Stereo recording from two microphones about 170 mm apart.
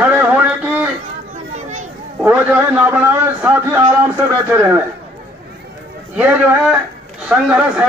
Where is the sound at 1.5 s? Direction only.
45° right (ahead or behind).